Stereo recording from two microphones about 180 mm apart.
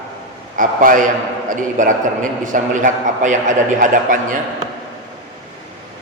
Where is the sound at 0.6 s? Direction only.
50° right (ahead or behind).